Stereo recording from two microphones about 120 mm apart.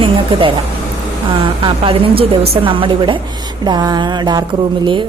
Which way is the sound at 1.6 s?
50° right (ahead or behind).